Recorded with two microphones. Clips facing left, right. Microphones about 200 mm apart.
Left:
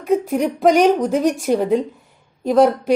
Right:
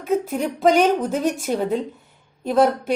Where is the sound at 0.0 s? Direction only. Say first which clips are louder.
Left 4 dB; centre (ahead or behind).